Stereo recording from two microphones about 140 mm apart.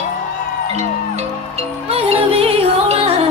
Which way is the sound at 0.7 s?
50° right (ahead or behind).